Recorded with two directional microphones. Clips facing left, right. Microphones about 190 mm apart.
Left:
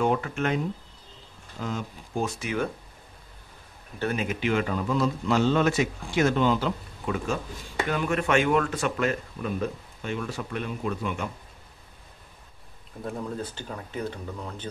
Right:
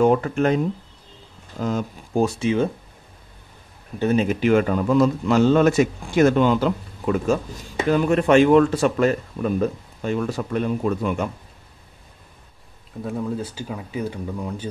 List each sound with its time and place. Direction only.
0.0 s speech: 40° right (ahead or behind)
1.6 s a man's voice: 45° right (ahead or behind)
2.3 s speech: 25° right (ahead or behind)
4.0 s speech: 25° right (ahead or behind)
4.3 s a man's voice: 45° right (ahead or behind)
7.9 s speech: 35° right (ahead or behind)
13.0 s speech: 5° right (ahead or behind)